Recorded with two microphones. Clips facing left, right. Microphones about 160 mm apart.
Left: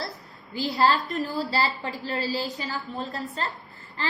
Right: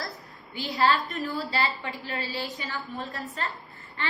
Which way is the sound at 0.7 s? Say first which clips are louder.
Left 1 dB; 35° left (ahead or behind).